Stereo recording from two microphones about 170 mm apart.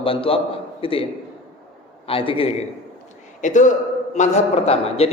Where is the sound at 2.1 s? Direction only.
35° left (ahead or behind).